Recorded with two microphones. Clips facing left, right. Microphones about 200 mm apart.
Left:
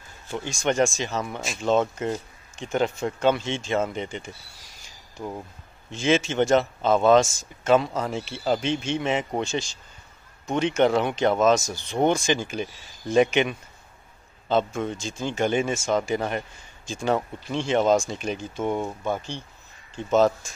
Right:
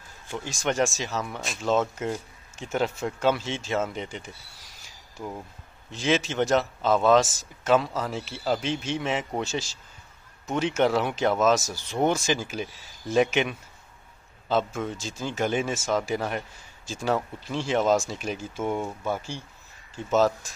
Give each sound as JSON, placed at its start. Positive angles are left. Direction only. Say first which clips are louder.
{"t": 0.4, "sound": "speech", "louder": "left 3 dB", "side_deg": -5}
{"t": 5.9, "sound": "speech", "louder": "left 3 dB", "side_deg": 0}